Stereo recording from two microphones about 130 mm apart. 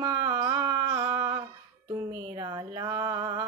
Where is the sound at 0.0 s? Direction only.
20° right (ahead or behind).